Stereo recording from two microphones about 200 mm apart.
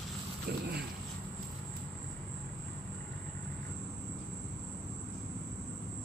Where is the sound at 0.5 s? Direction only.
50° right (ahead or behind).